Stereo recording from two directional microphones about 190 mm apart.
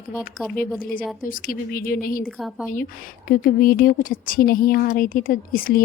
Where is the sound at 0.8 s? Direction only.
50° left (ahead or behind).